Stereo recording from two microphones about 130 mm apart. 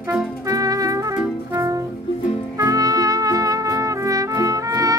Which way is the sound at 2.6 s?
25° right (ahead or behind).